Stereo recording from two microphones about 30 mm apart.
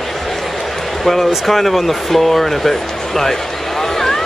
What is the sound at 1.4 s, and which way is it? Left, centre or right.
Speech, centre.